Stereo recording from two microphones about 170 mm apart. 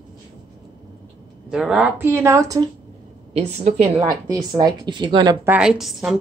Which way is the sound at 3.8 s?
25° right (ahead or behind).